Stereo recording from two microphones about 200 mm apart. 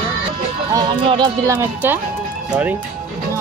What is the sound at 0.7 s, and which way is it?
Speech, 20° right (ahead or behind).